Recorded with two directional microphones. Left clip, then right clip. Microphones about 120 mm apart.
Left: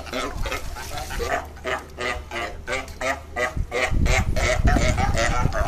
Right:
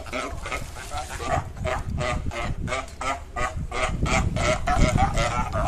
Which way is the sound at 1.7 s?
5° right (ahead or behind).